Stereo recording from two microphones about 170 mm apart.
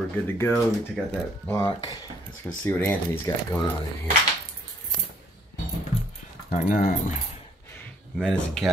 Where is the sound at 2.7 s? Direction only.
15° left (ahead or behind).